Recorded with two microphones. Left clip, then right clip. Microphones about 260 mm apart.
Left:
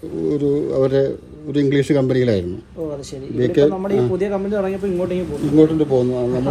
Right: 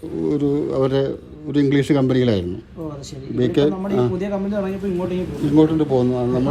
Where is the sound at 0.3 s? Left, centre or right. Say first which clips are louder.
Left 2 dB; centre.